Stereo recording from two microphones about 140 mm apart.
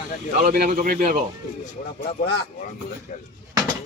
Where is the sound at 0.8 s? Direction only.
70° right (ahead or behind).